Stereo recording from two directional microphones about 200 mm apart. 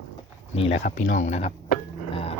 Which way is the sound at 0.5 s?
30° left (ahead or behind).